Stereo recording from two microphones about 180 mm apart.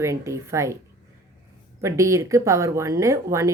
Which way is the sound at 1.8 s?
15° right (ahead or behind).